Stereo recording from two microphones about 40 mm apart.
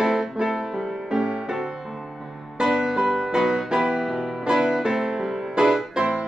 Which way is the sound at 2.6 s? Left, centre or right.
Centre.